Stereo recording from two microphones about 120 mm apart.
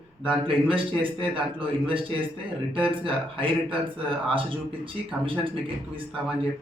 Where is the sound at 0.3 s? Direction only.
45° right (ahead or behind).